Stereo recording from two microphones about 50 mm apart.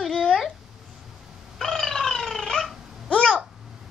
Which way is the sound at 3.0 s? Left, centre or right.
Centre.